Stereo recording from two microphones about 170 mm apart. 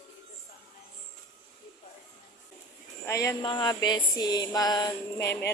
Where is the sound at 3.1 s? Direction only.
20° left (ahead or behind).